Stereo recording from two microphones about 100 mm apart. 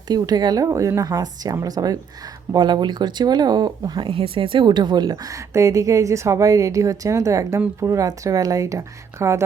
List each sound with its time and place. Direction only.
0.1 s a woman's voice: 45° right (ahead or behind)
4.0 s a woman's voice: 60° right (ahead or behind); by 9.4 s 30° right (ahead or behind)